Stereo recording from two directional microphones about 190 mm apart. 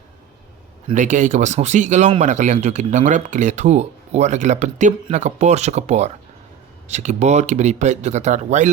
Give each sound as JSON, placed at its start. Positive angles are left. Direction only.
{"t": 0.9, "sound": "speech", "side_deg": -40}